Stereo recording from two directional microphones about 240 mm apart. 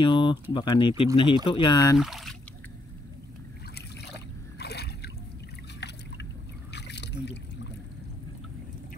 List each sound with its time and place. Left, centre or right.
0.0 s speech: centre
2.0 s speech: centre
4.6 s a sound: left
6.7 s trickle: left